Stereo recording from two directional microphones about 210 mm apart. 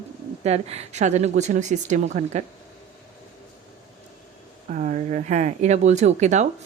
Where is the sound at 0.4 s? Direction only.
30° right (ahead or behind).